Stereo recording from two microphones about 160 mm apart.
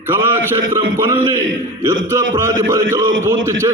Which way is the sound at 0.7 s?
15° right (ahead or behind).